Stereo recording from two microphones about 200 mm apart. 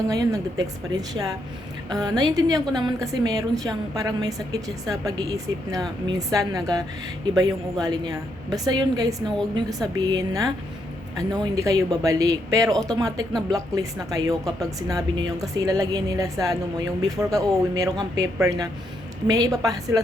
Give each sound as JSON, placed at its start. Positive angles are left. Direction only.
{"t": 0.1, "sound": "a woman's voice", "side_deg": -15}